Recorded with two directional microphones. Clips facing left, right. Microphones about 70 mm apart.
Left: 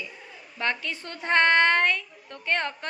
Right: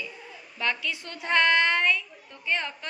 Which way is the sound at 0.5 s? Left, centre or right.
Left.